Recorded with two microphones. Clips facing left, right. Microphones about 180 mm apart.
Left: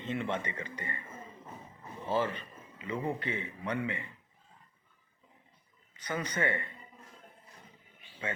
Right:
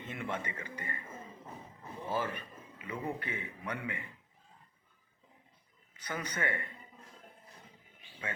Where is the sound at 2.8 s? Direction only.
25° left (ahead or behind).